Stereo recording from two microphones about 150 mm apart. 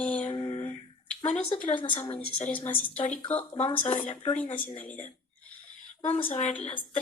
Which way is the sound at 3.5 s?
40° left (ahead or behind).